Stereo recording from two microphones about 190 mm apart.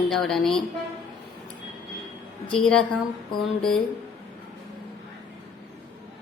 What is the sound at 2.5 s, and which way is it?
A woman's voice, 5° left (ahead or behind).